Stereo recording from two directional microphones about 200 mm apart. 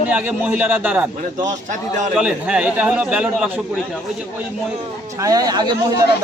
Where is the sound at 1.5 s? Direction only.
35° right (ahead or behind).